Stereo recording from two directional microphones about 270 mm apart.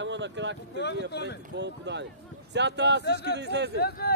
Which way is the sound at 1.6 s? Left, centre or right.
Right.